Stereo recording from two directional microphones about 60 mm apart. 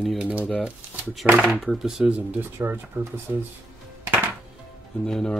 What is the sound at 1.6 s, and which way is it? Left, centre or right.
Speech, centre.